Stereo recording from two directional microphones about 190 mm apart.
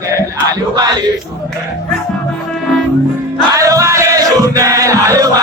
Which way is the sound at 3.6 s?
15° right (ahead or behind).